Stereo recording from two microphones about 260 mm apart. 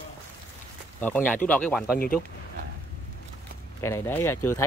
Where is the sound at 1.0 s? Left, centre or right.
Centre.